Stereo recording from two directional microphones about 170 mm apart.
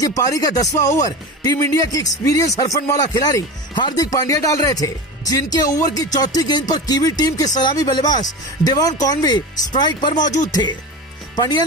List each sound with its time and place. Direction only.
0.0 s speech: 20° left (ahead or behind)
0.7 s speech: 45° left (ahead or behind)
1.4 s speech: 20° left (ahead or behind)